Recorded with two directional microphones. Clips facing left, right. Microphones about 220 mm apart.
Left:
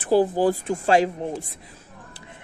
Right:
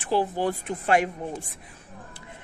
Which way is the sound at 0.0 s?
40° left (ahead or behind).